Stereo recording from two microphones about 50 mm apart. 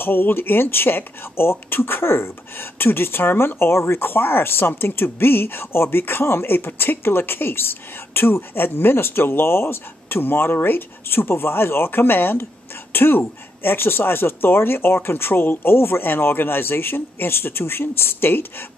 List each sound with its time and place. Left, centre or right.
0.0 s speech: left